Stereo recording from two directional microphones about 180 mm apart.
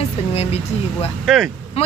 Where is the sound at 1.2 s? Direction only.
Centre (ahead or behind).